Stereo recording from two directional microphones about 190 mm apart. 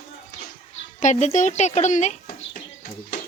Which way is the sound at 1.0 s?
40° left (ahead or behind).